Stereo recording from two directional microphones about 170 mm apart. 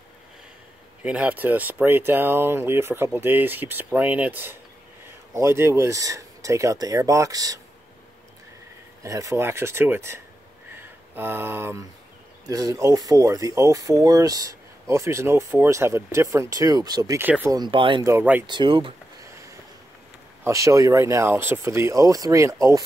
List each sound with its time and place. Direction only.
1.0 s speech: 5° right (ahead or behind)
9.0 s speech: 20° right (ahead or behind)
17.2 s speech: 10° right (ahead or behind)
17.6 s speech: 30° right (ahead or behind)
18.0 s speech: 10° right (ahead or behind)
18.5 s speech: 30° right (ahead or behind)
20.4 s speech: 20° right (ahead or behind)